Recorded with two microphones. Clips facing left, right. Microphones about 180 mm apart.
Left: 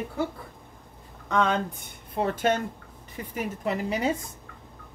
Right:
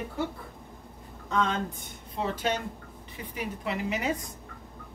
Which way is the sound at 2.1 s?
50° left (ahead or behind).